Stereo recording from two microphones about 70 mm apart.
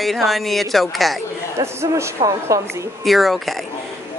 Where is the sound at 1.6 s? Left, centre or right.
Right.